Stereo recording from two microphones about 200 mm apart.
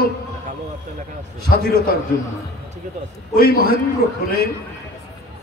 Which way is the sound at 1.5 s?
50° left (ahead or behind).